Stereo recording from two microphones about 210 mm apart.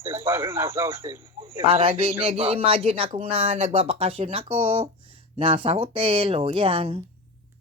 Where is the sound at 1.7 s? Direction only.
25° right (ahead or behind).